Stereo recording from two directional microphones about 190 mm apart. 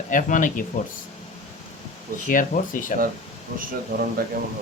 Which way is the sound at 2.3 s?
45° left (ahead or behind).